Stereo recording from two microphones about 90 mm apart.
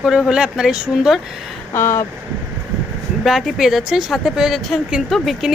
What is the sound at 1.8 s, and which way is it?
Speech, 30° left (ahead or behind).